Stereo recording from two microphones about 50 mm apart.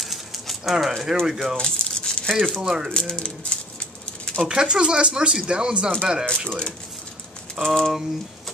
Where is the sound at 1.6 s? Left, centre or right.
Centre.